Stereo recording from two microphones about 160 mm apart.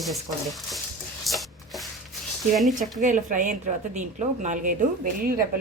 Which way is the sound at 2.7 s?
55° right (ahead or behind).